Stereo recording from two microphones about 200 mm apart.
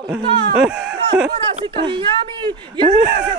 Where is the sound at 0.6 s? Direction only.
5° right (ahead or behind).